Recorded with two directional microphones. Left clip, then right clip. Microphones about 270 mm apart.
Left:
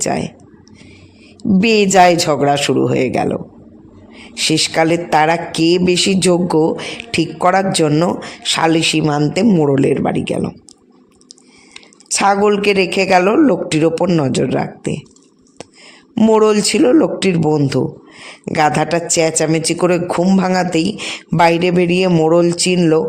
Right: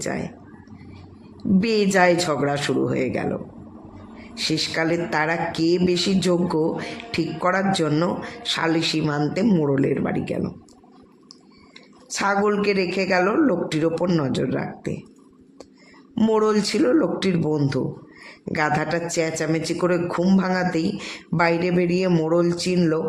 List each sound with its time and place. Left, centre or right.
0.0 s a man's voice: left
1.4 s a man's voice: left
11.7 s a man's voice: left
16.1 s a man's voice: left